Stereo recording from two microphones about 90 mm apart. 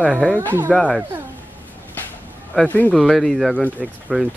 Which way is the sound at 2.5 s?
10° left (ahead or behind).